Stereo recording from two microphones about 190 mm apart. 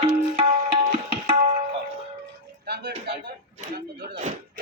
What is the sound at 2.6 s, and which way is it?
Music, 60° right (ahead or behind).